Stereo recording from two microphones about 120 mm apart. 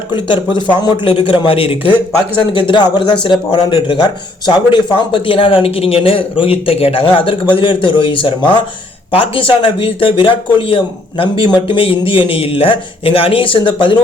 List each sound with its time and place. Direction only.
0.1 s a man's voice: 40° left (ahead or behind)